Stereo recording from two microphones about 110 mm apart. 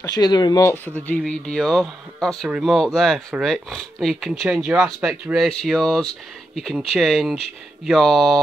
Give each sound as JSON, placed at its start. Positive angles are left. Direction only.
{"t": 0.1, "sound": "speech", "side_deg": 40}
{"t": 1.2, "sound": "speech", "side_deg": 0}